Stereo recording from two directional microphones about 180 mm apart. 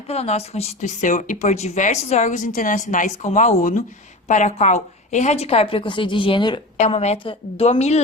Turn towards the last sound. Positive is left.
turn(degrees=40)  # may be behind; listen again after turning